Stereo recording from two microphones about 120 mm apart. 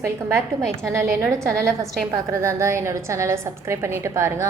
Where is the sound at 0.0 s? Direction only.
25° right (ahead or behind).